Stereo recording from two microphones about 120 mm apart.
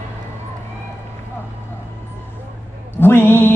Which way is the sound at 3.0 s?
20° left (ahead or behind).